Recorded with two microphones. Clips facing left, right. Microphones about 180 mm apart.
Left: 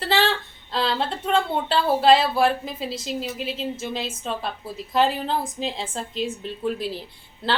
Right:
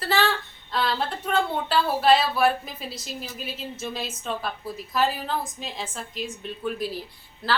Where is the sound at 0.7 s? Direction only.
25° left (ahead or behind).